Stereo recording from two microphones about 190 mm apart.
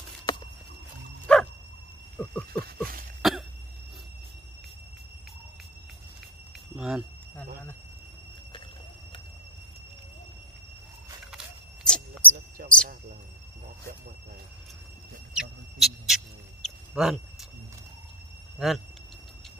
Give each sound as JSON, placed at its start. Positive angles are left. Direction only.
{"t": 1.2, "sound": "bow-wow", "side_deg": 5}
{"t": 2.2, "sound": "cricket", "side_deg": 5}
{"t": 2.5, "sound": "a sound", "side_deg": -50}
{"t": 3.2, "sound": "cough", "side_deg": 0}
{"t": 6.8, "sound": "speech", "side_deg": -5}
{"t": 11.3, "sound": "a sound", "side_deg": 5}
{"t": 12.6, "sound": "basketball bounce", "side_deg": -55}
{"t": 15.3, "sound": "owl", "side_deg": 0}
{"t": 16.6, "sound": "a sound", "side_deg": -5}
{"t": 18.6, "sound": "speech", "side_deg": 0}